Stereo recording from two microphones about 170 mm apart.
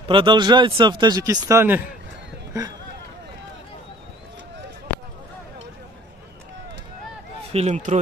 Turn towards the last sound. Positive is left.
turn(degrees=-45)  # may be behind; listen again after turning